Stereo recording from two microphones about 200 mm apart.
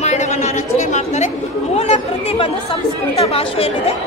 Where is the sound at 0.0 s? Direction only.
35° left (ahead or behind).